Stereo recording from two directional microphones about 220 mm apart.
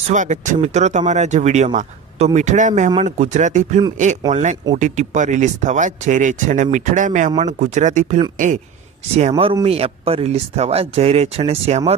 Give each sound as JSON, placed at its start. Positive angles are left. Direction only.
{"t": 0.1, "sound": "speech", "side_deg": -35}
{"t": 9.3, "sound": "speech", "side_deg": -20}